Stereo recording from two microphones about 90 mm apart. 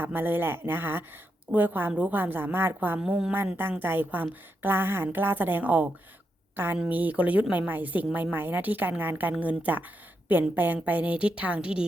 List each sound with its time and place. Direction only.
0.0 s a woman's voice: 20° right (ahead or behind)
3.0 s a woman's voice: 10° right (ahead or behind)
3.3 s a woman's voice: 25° right (ahead or behind)